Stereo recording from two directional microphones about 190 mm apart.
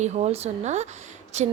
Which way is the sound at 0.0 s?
35° right (ahead or behind).